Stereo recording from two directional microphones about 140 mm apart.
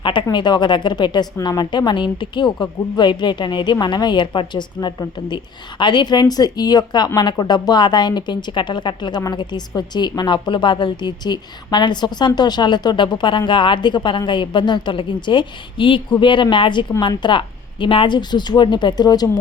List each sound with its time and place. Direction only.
0.0 s speech: 35° left (ahead or behind)